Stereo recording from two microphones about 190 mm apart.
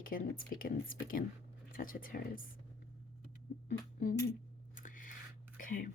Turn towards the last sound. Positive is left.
turn(degrees=45)  # may be behind; listen again after turning